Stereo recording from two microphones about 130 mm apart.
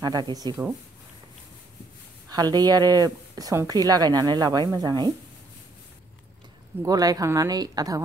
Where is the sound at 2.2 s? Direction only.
30° right (ahead or behind).